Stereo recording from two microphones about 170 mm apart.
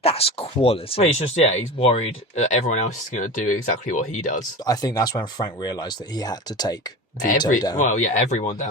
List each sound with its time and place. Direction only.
0.0 s speech: 35° left (ahead or behind)
4.6 s speech: 25° left (ahead or behind)
7.2 s speech: 50° left (ahead or behind)